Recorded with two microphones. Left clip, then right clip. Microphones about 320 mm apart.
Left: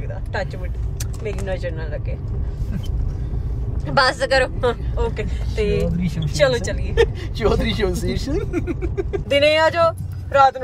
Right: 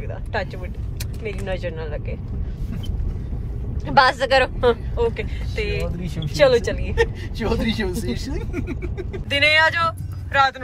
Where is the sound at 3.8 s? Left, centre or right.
Centre.